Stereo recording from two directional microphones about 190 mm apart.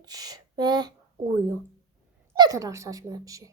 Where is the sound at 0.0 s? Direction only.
20° right (ahead or behind).